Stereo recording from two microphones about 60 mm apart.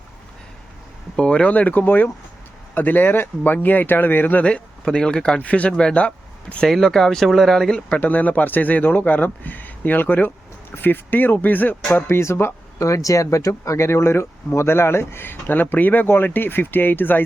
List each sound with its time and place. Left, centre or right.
1.2 s speech: centre
4.4 s speech: centre
6.7 s speech: centre
7.9 s speech: left
12.0 s speech: left
12.8 s speech: left
13.5 s speech: left